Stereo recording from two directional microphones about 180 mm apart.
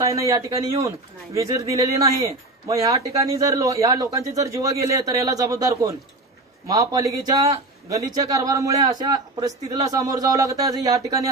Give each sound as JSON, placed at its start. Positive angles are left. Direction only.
{"t": 0.0, "sound": "a man's voice", "side_deg": -15}